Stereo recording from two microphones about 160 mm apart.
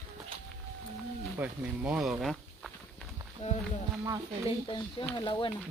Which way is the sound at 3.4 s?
45° left (ahead or behind).